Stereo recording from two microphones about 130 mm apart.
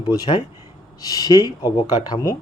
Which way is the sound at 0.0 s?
35° left (ahead or behind).